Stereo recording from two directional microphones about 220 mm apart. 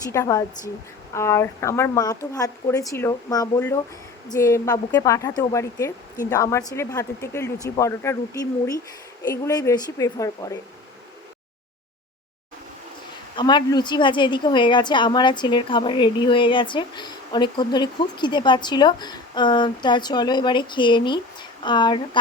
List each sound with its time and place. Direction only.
0.1 s speech: 15° left (ahead or behind)
13.3 s a woman's voice: 20° left (ahead or behind)